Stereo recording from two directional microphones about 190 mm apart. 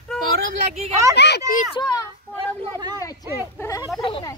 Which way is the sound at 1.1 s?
60° left (ahead or behind).